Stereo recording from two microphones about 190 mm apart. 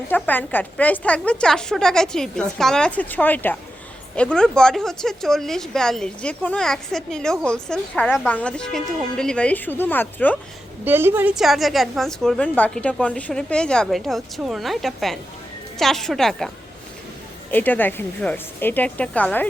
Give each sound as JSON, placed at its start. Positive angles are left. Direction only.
{"t": 0.1, "sound": "a woman's voice", "side_deg": 10}
{"t": 10.8, "sound": "speech", "side_deg": -10}
{"t": 17.5, "sound": "a woman's voice", "side_deg": 10}